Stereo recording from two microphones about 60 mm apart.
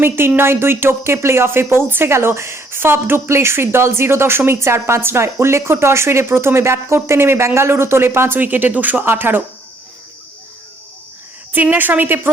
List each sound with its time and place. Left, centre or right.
0.0 s speech: right
8.4 s speech: right
11.5 s speech: right